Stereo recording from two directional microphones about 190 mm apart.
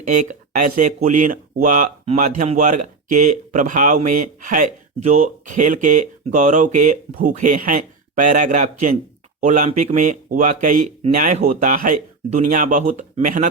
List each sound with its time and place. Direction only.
0.1 s speech: 40° right (ahead or behind)